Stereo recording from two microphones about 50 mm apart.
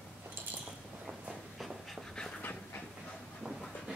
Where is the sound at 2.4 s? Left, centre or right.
Left.